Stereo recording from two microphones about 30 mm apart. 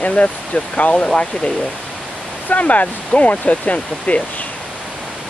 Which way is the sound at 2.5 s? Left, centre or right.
Left.